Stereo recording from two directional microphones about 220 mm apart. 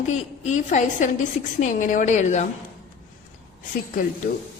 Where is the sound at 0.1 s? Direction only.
30° left (ahead or behind).